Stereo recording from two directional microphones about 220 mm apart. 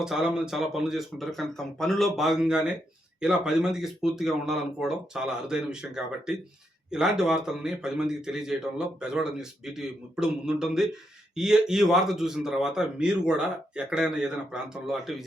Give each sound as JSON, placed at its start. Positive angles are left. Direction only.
{"t": 0.0, "sound": "speech", "side_deg": -5}